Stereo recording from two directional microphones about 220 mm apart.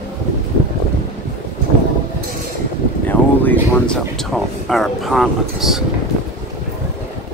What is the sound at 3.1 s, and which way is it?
Speech, 5° left (ahead or behind).